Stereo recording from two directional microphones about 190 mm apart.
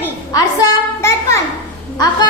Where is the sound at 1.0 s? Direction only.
15° left (ahead or behind).